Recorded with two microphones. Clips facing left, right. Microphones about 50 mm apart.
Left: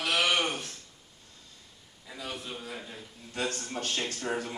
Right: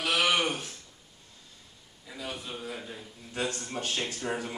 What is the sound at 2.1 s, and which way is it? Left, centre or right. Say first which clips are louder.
A man's voice: right 1 dB; centre.